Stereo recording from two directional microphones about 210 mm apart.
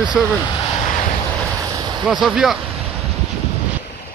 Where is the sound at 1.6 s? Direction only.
15° right (ahead or behind).